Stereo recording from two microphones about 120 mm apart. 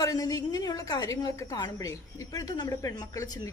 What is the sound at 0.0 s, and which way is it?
Speech, 30° left (ahead or behind).